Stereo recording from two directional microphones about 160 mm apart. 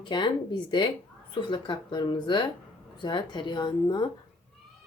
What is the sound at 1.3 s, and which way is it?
Speech, 30° left (ahead or behind).